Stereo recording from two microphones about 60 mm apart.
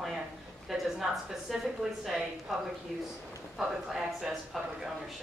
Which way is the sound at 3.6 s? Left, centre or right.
Centre.